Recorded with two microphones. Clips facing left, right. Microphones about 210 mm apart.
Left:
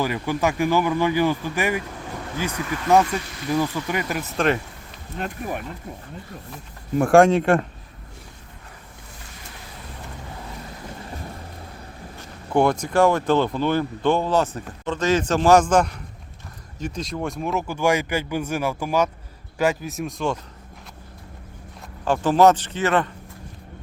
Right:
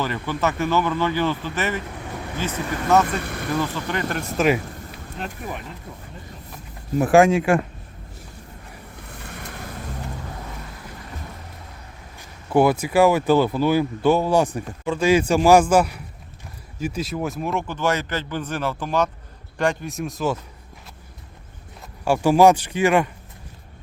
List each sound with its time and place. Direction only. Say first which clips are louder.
0.0 s speech: left 1 dB; 10° left (ahead or behind)
3.2 s speech: right 3 dB; 55° right (ahead or behind)
3.6 s speech: left 1 dB; 10° left (ahead or behind)
4.4 s speech: right 2 dB; 5° right (ahead or behind)
7.0 s speech: left 1 dB; centre (ahead or behind)
9.2 s boat: right 8 dB; 60° right (ahead or behind)
12.5 s speech: right 2 dB; 5° right (ahead or behind)
22.0 s speech: right 1 dB; 10° right (ahead or behind)